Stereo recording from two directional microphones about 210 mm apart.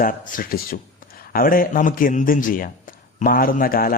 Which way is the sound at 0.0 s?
40° left (ahead or behind).